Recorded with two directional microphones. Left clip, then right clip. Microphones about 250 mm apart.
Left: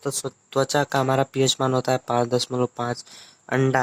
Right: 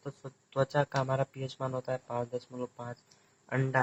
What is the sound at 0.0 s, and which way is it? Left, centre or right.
A man's voice, left.